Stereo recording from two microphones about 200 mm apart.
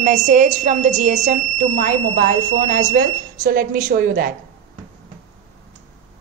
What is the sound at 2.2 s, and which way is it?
Speech, 50° right (ahead or behind).